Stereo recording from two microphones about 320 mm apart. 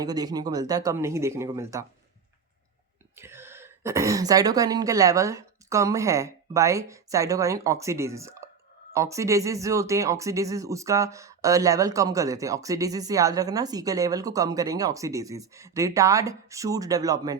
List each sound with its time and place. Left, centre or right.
0.0 s speech: centre
3.2 s speech: centre